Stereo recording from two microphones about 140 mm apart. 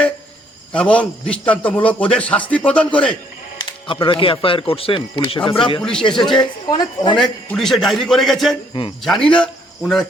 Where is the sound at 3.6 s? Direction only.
35° left (ahead or behind).